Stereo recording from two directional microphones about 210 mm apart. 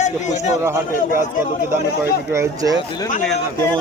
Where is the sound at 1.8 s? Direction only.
50° left (ahead or behind).